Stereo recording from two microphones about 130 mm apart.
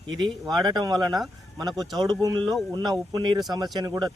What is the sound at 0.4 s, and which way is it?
Speech, 30° right (ahead or behind).